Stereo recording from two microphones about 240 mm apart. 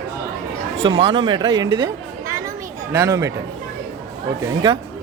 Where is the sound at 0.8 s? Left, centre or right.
Centre.